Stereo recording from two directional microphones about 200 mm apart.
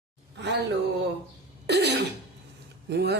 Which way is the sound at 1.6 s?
55° right (ahead or behind).